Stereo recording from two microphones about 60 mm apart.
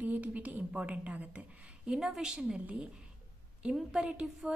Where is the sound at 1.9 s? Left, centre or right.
Centre.